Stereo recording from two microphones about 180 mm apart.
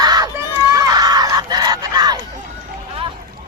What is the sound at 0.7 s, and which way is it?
Screaming, 20° right (ahead or behind).